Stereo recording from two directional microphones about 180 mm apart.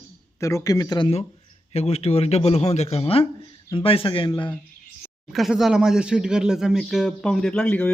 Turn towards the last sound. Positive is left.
turn(degrees=10)  # may be behind; listen again after turning